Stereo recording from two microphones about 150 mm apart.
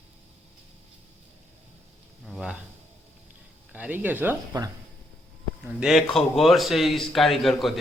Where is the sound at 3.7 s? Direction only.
10° right (ahead or behind).